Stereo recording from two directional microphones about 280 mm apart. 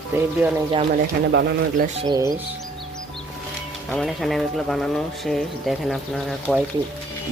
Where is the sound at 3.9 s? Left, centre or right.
Centre.